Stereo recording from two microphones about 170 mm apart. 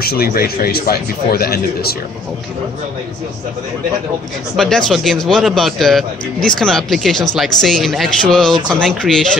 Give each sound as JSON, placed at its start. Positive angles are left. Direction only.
{"t": 0.0, "sound": "speech", "side_deg": 65}
{"t": 4.6, "sound": "a man's voice", "side_deg": 0}